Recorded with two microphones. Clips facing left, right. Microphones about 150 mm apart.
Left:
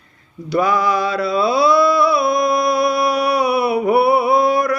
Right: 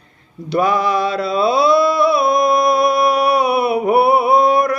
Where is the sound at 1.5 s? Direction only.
55° right (ahead or behind).